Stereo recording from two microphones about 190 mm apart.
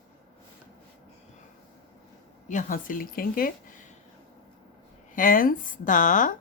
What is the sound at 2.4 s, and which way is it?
Speech, 45° left (ahead or behind).